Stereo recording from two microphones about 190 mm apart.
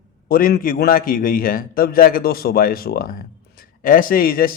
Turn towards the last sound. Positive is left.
turn(degrees=50)  # may be behind; listen again after turning